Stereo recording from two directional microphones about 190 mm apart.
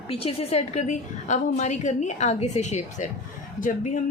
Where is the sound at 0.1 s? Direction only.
30° left (ahead or behind).